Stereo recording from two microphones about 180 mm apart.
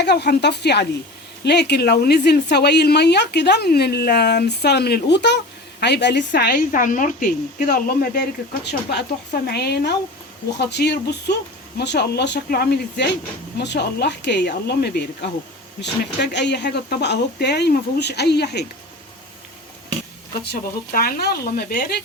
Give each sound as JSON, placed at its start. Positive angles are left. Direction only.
{"t": 0.0, "sound": "a woman's voice", "side_deg": 70}
{"t": 8.6, "sound": "speech", "side_deg": 65}
{"t": 20.4, "sound": "speech", "side_deg": 60}